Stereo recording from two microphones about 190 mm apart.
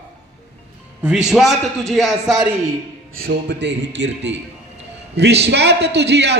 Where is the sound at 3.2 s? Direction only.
60° right (ahead or behind).